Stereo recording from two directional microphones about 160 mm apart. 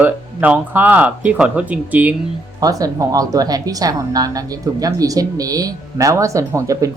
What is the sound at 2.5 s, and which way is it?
A woman's voice, 20° right (ahead or behind).